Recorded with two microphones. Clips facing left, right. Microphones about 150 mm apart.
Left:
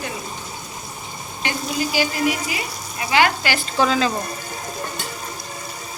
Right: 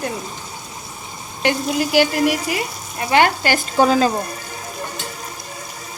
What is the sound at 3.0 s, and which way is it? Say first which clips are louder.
Speech: right 3 dB; 50° right (ahead or behind).